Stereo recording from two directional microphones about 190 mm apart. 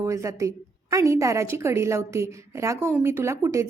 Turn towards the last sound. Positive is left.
turn(degrees=-15)  # may be behind; listen again after turning